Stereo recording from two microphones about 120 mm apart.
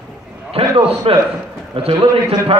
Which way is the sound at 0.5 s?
50° right (ahead or behind).